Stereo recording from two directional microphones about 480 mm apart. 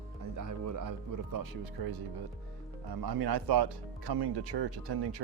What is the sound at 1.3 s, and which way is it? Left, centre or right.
Speech, right.